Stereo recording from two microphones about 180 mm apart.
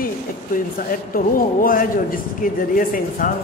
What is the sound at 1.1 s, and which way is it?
Speech, 50° left (ahead or behind).